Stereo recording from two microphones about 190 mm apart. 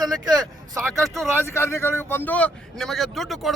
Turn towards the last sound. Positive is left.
turn(degrees=0)  # may be behind; listen again after turning